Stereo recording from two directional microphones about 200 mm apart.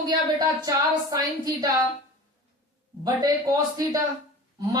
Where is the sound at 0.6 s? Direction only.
20° right (ahead or behind).